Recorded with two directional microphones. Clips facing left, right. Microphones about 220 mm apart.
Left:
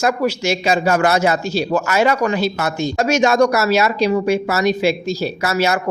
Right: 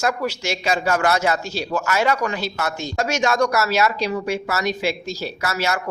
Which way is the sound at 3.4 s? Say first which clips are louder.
Left 4 dB; 25° left (ahead or behind).